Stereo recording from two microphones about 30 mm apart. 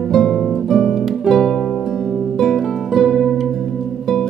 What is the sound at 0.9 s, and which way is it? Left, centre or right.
Harp, centre.